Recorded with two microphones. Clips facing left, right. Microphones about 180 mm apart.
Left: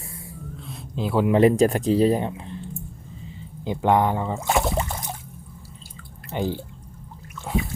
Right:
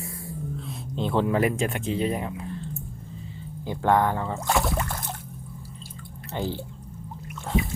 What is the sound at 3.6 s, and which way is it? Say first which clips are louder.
Speech: left 2 dB; 20° left (ahead or behind).